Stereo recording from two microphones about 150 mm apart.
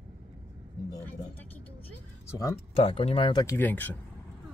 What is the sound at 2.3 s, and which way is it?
Speech, 25° left (ahead or behind).